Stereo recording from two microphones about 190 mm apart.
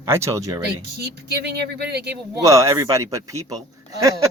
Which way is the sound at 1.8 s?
55° right (ahead or behind).